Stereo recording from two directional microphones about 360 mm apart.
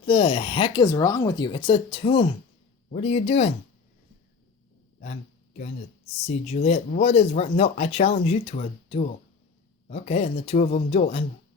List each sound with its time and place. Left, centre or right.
0.0 s speech: centre
6.2 s speech: centre